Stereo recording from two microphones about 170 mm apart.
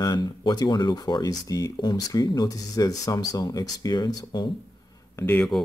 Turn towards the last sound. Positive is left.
turn(degrees=5)  # may be behind; listen again after turning